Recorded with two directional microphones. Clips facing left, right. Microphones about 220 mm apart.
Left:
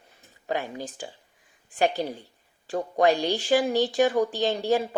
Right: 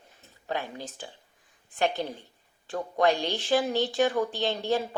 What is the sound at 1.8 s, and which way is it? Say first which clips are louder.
Speech: left 3 dB; 40° left (ahead or behind).